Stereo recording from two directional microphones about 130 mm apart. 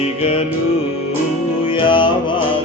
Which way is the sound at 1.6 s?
40° left (ahead or behind).